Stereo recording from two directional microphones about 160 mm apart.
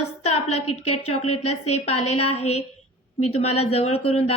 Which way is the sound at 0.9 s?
40° left (ahead or behind).